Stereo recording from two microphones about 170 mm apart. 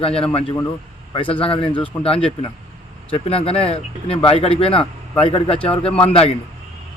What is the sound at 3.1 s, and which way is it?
Speech, 35° left (ahead or behind).